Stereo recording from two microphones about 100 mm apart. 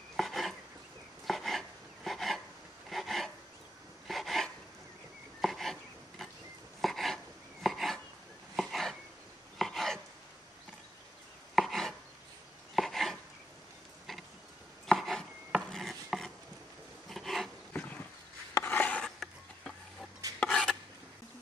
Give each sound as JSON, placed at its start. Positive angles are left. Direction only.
{"t": 0.1, "sound": "chopping", "side_deg": 0}
{"t": 2.9, "sound": "a sound", "side_deg": 0}
{"t": 5.4, "sound": "chopping", "side_deg": 0}
{"t": 6.8, "sound": "a sound", "side_deg": 0}
{"t": 7.6, "sound": "chopping", "side_deg": 0}
{"t": 8.5, "sound": "a sound", "side_deg": 0}
{"t": 11.5, "sound": "chopping", "side_deg": 0}
{"t": 14.9, "sound": "chopping", "side_deg": 0}
{"t": 17.1, "sound": "filing", "side_deg": 0}
{"t": 17.7, "sound": "dog", "side_deg": 15}
{"t": 18.5, "sound": "filing", "side_deg": 20}
{"t": 19.1, "sound": "a sound", "side_deg": 0}
{"t": 20.3, "sound": "dishes", "side_deg": 5}